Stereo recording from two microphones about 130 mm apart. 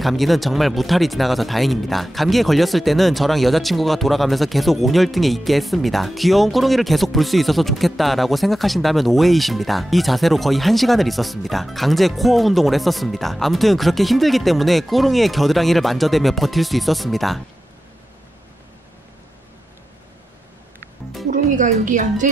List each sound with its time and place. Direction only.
0.0 s speech: centre (ahead or behind)
21.3 s a woman's voice: 80° right